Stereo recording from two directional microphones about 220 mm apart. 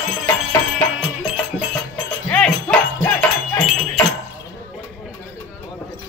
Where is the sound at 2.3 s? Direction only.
5° left (ahead or behind).